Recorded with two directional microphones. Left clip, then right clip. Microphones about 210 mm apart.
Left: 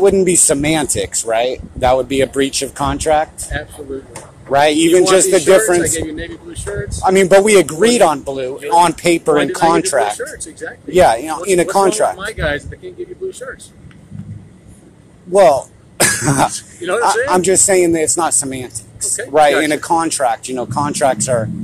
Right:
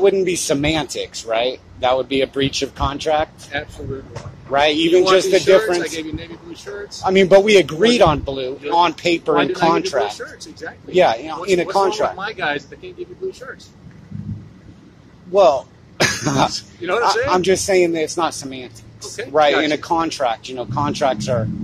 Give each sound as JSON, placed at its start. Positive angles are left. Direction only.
{"t": 0.0, "sound": "speech", "side_deg": 15}
{"t": 3.5, "sound": "speech", "side_deg": 5}
{"t": 4.5, "sound": "speech", "side_deg": 15}
{"t": 5.8, "sound": "speech", "side_deg": 5}
{"t": 7.0, "sound": "speech", "side_deg": 20}
{"t": 12.2, "sound": "speech", "side_deg": 5}
{"t": 15.3, "sound": "speech", "side_deg": 20}
{"t": 16.5, "sound": "speech", "side_deg": 5}
{"t": 17.3, "sound": "speech", "side_deg": 20}